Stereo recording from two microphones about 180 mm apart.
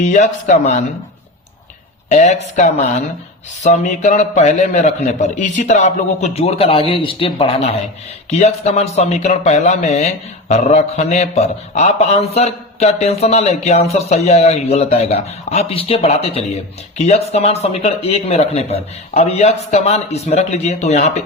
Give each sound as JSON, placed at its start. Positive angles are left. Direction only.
{"t": 0.0, "sound": "speech", "side_deg": 45}
{"t": 2.0, "sound": "speech", "side_deg": 40}